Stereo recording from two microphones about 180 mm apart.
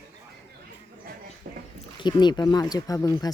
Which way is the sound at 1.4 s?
45° right (ahead or behind).